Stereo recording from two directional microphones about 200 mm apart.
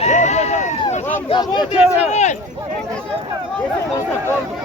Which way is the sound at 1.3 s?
20° left (ahead or behind).